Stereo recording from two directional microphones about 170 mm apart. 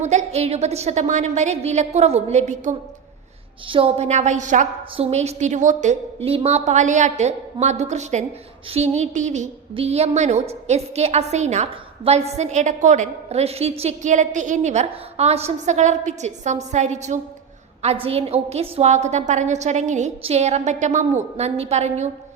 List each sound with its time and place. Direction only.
0.0 s a woman's voice: 45° right (ahead or behind)